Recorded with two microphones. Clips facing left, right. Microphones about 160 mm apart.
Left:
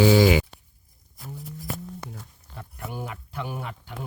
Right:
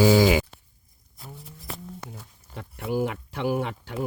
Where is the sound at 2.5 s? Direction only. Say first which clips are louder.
Right 9 dB; 80° right.